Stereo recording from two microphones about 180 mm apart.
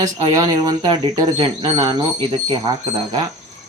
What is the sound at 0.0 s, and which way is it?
A man's voice, 20° right (ahead or behind).